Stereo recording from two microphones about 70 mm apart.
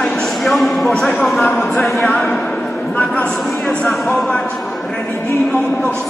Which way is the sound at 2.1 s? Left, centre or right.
Centre.